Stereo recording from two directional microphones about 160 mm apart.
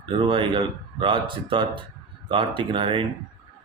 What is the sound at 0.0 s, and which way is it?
Speech, 30° right (ahead or behind).